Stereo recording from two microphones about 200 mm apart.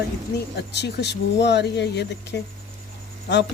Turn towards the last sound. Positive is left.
turn(degrees=60)  # may be behind; listen again after turning